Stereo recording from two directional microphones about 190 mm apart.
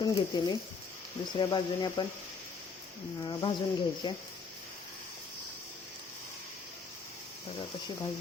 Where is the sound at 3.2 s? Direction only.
25° left (ahead or behind).